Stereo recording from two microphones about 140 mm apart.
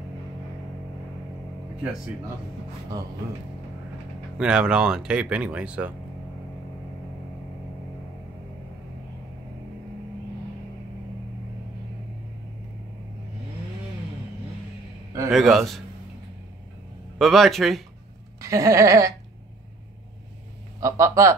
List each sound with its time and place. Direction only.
4.4 s speech: 5° right (ahead or behind)
15.3 s speech: centre (ahead or behind)
17.2 s speech: centre (ahead or behind)
18.4 s bleat: 20° right (ahead or behind)
20.8 s bleat: 20° right (ahead or behind)